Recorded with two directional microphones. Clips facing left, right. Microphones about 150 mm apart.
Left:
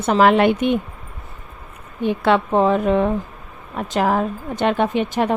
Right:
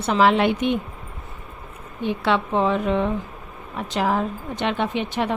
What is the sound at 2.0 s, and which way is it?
Speech, 50° left (ahead or behind).